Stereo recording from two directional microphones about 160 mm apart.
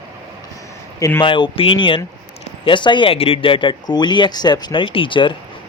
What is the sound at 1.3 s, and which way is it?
Speech, 35° left (ahead or behind).